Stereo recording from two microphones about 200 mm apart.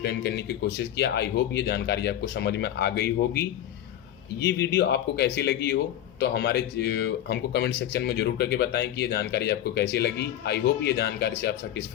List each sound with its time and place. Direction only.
0.0 s speech: 55° left (ahead or behind)
4.4 s speech: 55° left (ahead or behind)